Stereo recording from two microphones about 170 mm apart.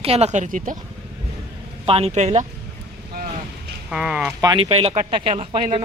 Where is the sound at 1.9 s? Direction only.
35° right (ahead or behind).